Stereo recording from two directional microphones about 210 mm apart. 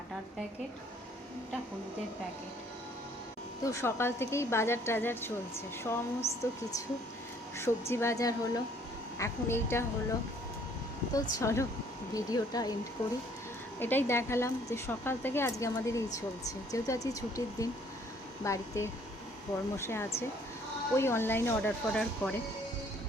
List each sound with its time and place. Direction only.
3.7 s a woman's voice: 10° left (ahead or behind)
13.7 s a woman's voice: 10° left (ahead or behind)